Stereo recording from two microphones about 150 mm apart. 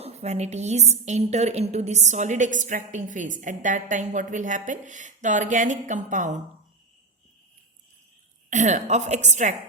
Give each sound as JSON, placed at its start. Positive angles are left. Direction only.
{"t": 0.0, "sound": "a woman's voice", "side_deg": -45}
{"t": 8.4, "sound": "a woman's voice", "side_deg": -55}